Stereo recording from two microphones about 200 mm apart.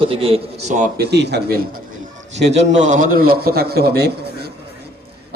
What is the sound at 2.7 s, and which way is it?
A man's voice, 40° right (ahead or behind).